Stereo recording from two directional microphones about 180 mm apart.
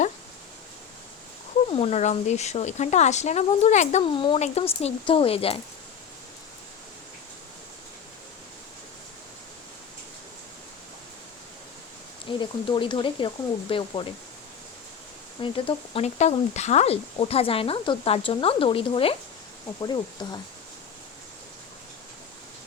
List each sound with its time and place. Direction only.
1.7 s speech: 35° left (ahead or behind)
12.4 s speech: 25° left (ahead or behind)
15.4 s speech: 30° left (ahead or behind)